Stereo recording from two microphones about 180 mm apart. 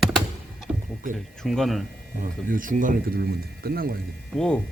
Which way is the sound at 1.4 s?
Centre (ahead or behind).